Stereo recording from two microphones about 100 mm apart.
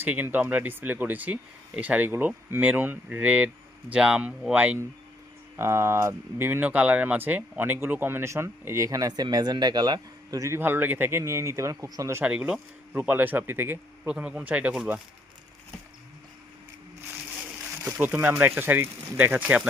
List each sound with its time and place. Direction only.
0.0 s speech: 20° right (ahead or behind)
5.5 s speech: 25° right (ahead or behind)
10.6 s speech: 20° right (ahead or behind)
12.2 s speech: 10° right (ahead or behind)
14.1 s speech: 10° right (ahead or behind)
17.9 s speech: 20° right (ahead or behind)